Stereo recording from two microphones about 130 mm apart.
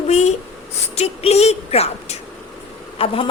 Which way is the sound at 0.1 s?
55° left (ahead or behind).